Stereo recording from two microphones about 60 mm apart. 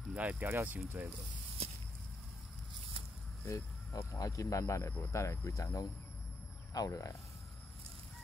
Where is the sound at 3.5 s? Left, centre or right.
Left.